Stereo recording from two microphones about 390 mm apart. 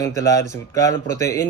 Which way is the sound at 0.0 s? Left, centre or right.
Centre.